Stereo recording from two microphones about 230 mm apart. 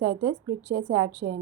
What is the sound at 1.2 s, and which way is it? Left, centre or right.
Speech, right.